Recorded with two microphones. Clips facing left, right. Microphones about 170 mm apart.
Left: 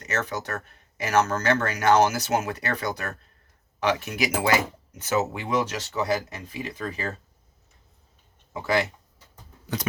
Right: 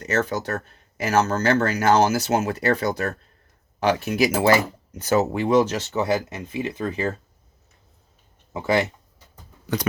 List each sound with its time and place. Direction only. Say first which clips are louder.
0.0 s speech: right 6 dB; 30° right (ahead or behind)